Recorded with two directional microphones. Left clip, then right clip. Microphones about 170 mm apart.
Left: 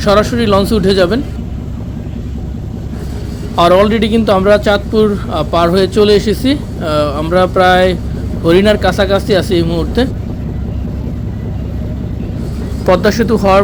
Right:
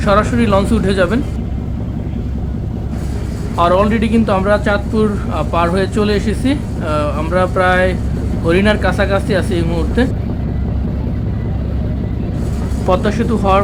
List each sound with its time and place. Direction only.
0.0 s a man's voice: 20° left (ahead or behind)
3.5 s a man's voice: 30° left (ahead or behind)
12.9 s a man's voice: 30° left (ahead or behind)